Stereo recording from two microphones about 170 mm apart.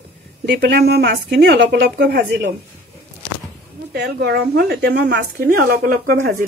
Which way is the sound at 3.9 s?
75° right (ahead or behind).